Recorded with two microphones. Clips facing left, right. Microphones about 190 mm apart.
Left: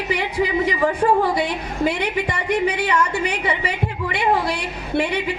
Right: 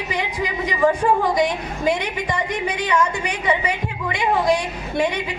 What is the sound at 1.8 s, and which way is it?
A woman's voice, 65° left (ahead or behind).